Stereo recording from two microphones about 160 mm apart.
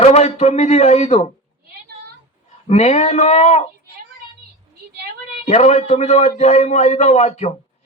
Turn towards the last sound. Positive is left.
turn(degrees=40)  # may be behind; listen again after turning